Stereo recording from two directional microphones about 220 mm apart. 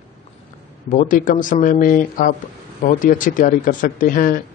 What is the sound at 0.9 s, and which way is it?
Speech, 35° left (ahead or behind).